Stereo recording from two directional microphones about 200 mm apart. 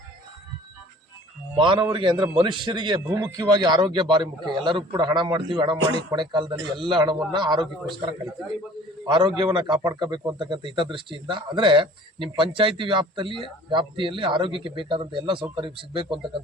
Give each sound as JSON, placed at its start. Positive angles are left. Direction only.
{"t": 1.5, "sound": "a man's voice", "side_deg": -25}
{"t": 9.0, "sound": "a man's voice", "side_deg": -25}